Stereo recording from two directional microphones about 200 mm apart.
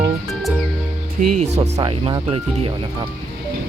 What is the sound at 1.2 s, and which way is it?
Speech, 40° right (ahead or behind).